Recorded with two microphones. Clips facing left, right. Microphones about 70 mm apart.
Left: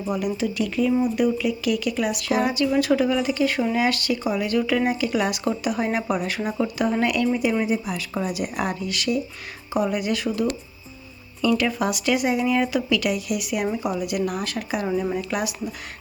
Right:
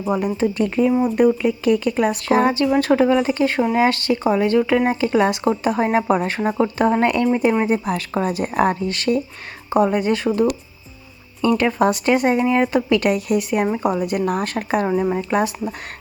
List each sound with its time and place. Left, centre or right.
0.0 s speech: right
11.4 s speech: right
15.1 s speech: right